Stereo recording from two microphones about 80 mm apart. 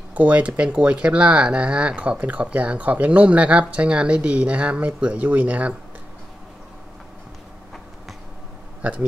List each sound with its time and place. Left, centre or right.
0.1 s speech: centre